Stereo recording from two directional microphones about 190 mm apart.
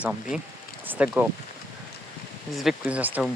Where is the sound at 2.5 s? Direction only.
5° right (ahead or behind).